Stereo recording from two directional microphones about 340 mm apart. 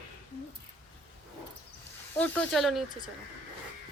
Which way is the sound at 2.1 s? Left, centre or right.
Centre.